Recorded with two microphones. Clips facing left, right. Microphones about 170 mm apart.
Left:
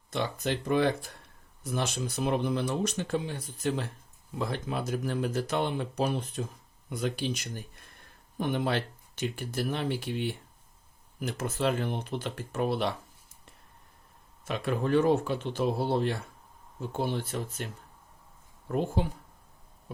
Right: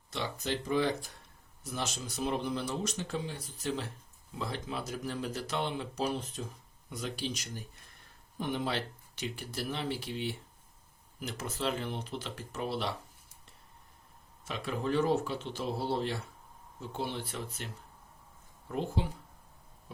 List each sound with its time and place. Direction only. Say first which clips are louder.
0.1 s speech: left 4 dB; 55° left (ahead or behind)
14.4 s speech: left 5 dB; 55° left (ahead or behind)
18.7 s speech: left 5 dB; 50° left (ahead or behind)